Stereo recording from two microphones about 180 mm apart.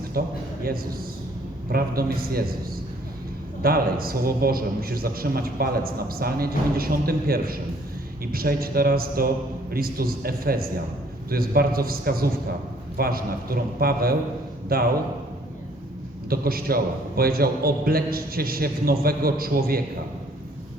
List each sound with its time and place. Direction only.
0.1 s a man's voice: 55° right (ahead or behind)
1.7 s a man's voice: 55° right (ahead or behind)
3.6 s a man's voice: 55° right (ahead or behind)
16.3 s a man's voice: 55° right (ahead or behind)